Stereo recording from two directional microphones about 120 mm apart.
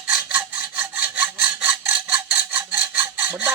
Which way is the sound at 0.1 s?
10° right (ahead or behind).